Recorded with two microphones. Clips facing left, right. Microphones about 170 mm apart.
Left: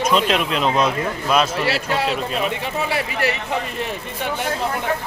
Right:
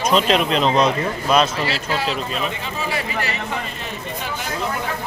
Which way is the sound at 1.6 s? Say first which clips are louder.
Left 2 dB; 65° left (ahead or behind).